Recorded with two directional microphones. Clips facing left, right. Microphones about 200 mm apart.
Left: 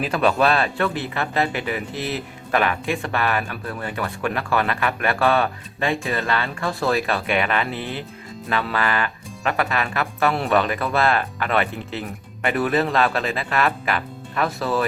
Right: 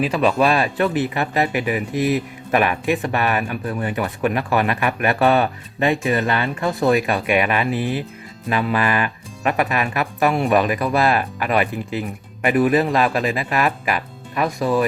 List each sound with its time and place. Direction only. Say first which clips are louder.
0.0 s speech: right 2 dB; 5° right (ahead or behind)